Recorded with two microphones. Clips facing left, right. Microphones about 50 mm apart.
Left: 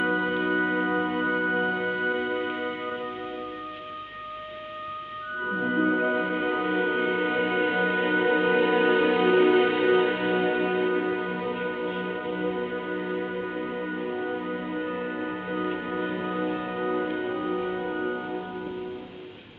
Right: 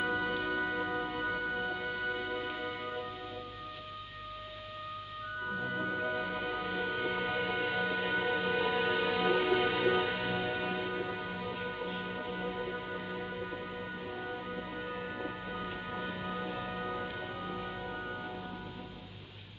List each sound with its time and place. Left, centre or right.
0.0 s music: left
5.4 s music: left